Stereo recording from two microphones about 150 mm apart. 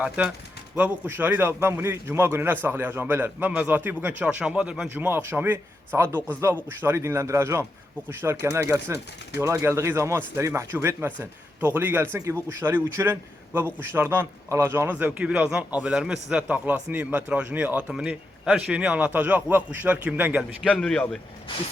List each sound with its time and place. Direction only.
0.8 s speech: 15° right (ahead or behind)
20.7 s a man's voice: centre (ahead or behind)